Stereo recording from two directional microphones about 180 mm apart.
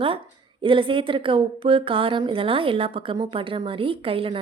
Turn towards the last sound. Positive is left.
turn(degrees=-30)  # may be behind; listen again after turning